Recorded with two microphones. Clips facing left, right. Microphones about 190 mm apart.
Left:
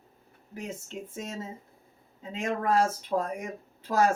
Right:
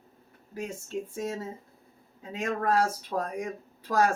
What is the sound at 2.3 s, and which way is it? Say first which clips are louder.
Speech: even; 25° left (ahead or behind).